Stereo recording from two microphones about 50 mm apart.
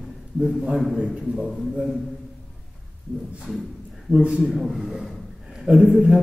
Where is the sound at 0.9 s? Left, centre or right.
Right.